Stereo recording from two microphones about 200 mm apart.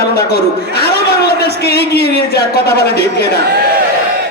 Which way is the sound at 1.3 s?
50° left (ahead or behind).